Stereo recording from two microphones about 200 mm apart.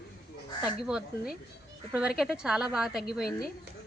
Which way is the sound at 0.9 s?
5° right (ahead or behind).